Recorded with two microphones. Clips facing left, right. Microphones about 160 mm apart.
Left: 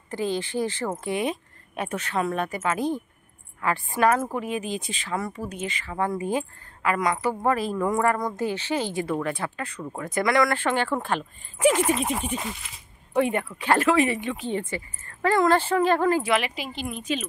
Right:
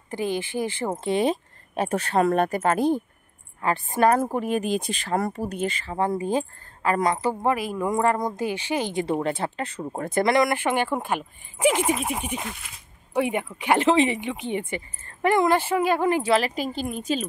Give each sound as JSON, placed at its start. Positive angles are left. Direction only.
{"t": 0.1, "sound": "speech", "side_deg": -15}
{"t": 1.0, "sound": "speech", "side_deg": -30}
{"t": 3.9, "sound": "speech", "side_deg": -40}
{"t": 4.7, "sound": "speech", "side_deg": -60}
{"t": 5.0, "sound": "speech", "side_deg": -40}
{"t": 7.5, "sound": "speech", "side_deg": -10}
{"t": 12.4, "sound": "speech", "side_deg": 0}
{"t": 13.1, "sound": "speech", "side_deg": -15}
{"t": 16.2, "sound": "speech", "side_deg": -35}